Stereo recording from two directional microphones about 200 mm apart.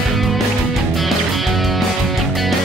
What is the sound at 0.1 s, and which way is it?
Music, centre (ahead or behind).